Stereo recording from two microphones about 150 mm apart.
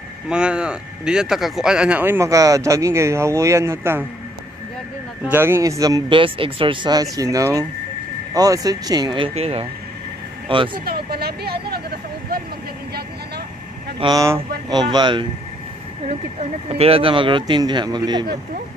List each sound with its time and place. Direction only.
0.3 s speech: 5° right (ahead or behind)
5.3 s speech: 15° right (ahead or behind); by 10.8 s 35° right (ahead or behind)
10.9 s speech: 90° right
13.9 s speech: 25° right (ahead or behind)
16.6 s speech: 40° right (ahead or behind)